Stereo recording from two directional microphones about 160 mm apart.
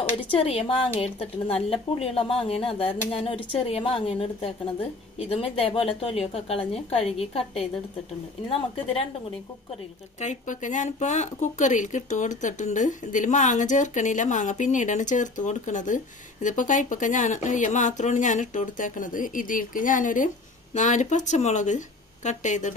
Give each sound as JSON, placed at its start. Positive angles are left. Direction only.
{"t": 0.2, "sound": "a woman's voice", "side_deg": 35}
{"t": 10.2, "sound": "speech", "side_deg": 50}